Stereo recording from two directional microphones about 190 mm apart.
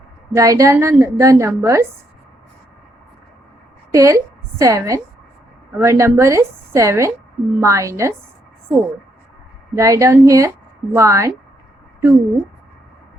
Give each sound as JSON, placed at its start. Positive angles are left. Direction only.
{"t": 0.3, "sound": "a woman's voice", "side_deg": -15}
{"t": 3.9, "sound": "a woman's voice", "side_deg": -15}
{"t": 9.7, "sound": "a woman's voice", "side_deg": -15}